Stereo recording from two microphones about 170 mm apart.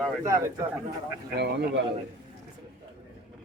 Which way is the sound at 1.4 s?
85° right.